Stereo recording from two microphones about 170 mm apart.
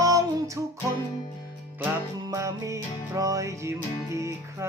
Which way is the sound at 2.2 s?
20° right (ahead or behind).